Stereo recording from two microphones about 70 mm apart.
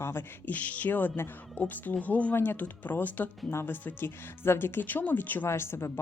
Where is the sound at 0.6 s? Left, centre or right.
Left.